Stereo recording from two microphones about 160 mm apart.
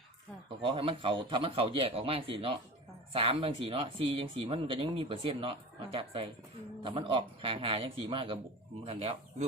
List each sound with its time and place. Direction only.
0.6 s speech: 35° right (ahead or behind)